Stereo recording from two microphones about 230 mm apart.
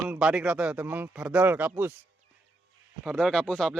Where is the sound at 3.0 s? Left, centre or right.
Centre.